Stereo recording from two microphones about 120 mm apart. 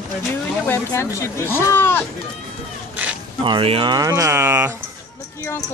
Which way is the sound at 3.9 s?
25° right (ahead or behind).